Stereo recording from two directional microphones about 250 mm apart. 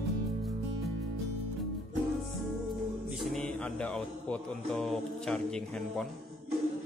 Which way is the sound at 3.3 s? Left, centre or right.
Centre.